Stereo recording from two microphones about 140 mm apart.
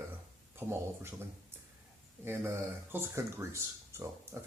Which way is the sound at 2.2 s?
15° right (ahead or behind).